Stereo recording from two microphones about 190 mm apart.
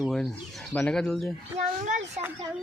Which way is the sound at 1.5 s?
40° right (ahead or behind).